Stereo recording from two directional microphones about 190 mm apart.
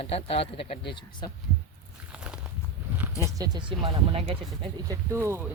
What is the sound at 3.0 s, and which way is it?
Speech, 15° right (ahead or behind).